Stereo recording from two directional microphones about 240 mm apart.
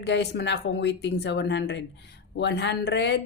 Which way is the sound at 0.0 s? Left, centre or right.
Left.